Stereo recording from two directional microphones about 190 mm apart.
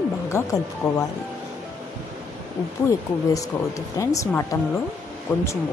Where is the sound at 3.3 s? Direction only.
15° left (ahead or behind).